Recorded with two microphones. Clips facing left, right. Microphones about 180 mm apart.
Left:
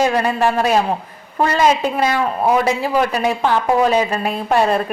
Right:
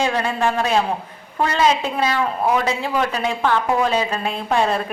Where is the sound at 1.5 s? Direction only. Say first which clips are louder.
Left 3 dB; 45° left (ahead or behind).